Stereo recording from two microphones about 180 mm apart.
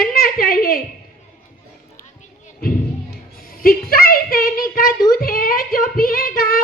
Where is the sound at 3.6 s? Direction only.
55° left (ahead or behind).